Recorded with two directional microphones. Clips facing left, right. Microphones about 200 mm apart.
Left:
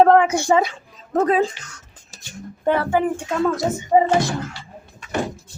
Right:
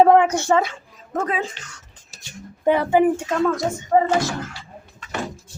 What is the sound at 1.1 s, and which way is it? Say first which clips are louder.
Speech: left 7 dB; 35° left (ahead or behind).